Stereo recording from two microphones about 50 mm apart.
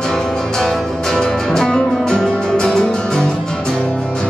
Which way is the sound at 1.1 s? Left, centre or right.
Centre.